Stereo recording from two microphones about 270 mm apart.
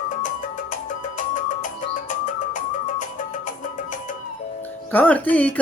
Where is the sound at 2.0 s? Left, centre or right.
Left.